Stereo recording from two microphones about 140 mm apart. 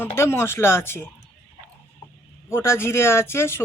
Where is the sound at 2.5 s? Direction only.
20° left (ahead or behind).